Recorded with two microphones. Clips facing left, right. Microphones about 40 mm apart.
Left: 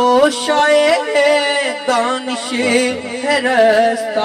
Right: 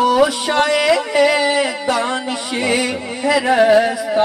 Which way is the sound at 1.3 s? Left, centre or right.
Left.